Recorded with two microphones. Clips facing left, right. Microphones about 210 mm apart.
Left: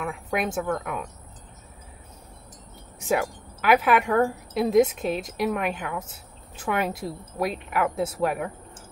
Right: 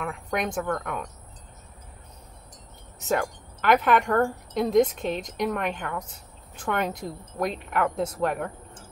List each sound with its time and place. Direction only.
0.0 s a woman's voice: 5° left (ahead or behind)
3.0 s a woman's voice: 10° left (ahead or behind)